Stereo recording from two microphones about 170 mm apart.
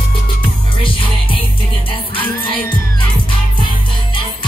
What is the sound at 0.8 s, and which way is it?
Music, 30° left (ahead or behind).